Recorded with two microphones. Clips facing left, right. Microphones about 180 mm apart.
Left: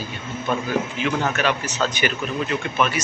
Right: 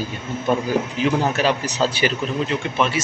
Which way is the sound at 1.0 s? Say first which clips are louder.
Right 4 dB; 35° right (ahead or behind).